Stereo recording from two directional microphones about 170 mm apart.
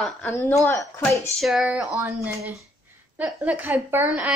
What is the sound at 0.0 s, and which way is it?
Speech, 15° left (ahead or behind).